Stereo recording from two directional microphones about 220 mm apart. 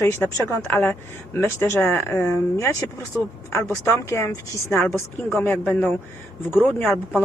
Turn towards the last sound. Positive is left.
turn(degrees=5)  # may be behind; listen again after turning